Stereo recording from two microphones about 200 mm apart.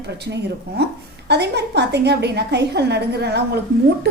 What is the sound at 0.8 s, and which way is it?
A woman's voice, 55° right (ahead or behind).